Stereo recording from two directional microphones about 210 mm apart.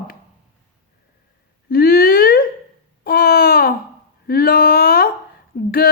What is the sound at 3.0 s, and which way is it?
Babbling, 45° left (ahead or behind).